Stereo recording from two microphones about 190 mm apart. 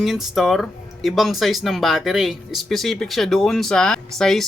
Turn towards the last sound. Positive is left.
turn(degrees=5)  # may be behind; listen again after turning